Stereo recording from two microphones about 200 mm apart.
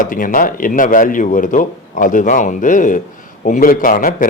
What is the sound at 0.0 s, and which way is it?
Speech, 45° left (ahead or behind).